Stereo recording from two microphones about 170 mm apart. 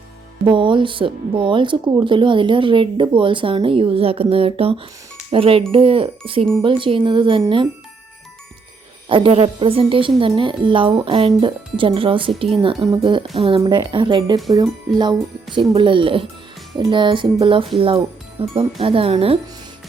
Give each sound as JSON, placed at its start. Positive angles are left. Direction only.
{"t": 0.4, "sound": "a woman's voice", "side_deg": -30}
{"t": 9.0, "sound": "a woman's voice", "side_deg": -30}
{"t": 15.7, "sound": "a woman's voice", "side_deg": -30}